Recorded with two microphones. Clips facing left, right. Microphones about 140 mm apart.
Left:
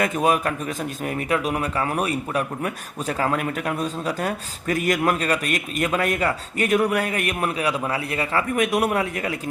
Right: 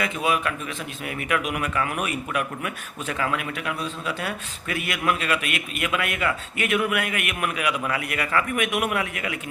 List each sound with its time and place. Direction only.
0.0 s a man's voice: 45° left (ahead or behind)